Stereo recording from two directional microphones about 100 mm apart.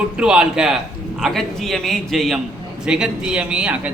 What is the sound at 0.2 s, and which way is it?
A man's voice, 10° right (ahead or behind).